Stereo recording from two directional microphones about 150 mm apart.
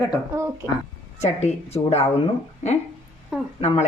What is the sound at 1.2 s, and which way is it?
Speech, 50° left (ahead or behind).